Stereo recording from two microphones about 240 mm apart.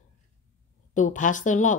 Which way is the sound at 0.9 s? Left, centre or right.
Left.